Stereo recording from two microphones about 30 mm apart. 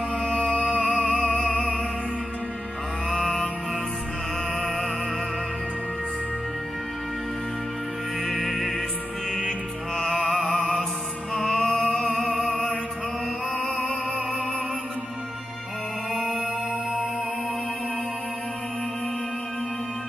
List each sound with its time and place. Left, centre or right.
0.7 s music: left
3.1 s mantra: centre
8.3 s music: centre
9.9 s music: left
11.6 s music: centre
12.2 s music: centre